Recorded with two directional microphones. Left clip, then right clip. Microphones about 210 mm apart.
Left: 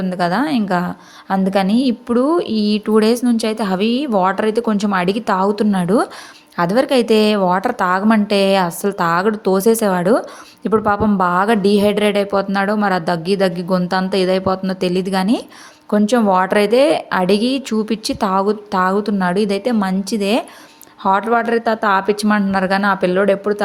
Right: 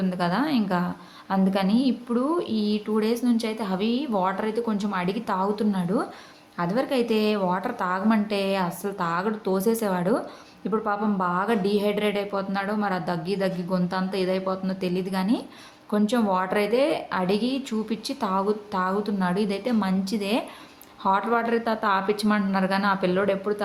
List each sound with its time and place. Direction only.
0.0 s a woman's voice: 30° left (ahead or behind)